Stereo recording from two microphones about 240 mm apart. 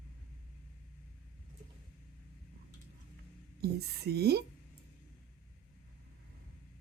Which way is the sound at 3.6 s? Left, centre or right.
Right.